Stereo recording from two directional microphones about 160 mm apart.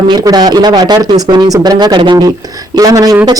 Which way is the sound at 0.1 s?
25° right (ahead or behind).